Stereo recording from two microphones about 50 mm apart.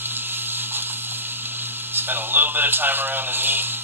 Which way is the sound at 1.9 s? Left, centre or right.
Right.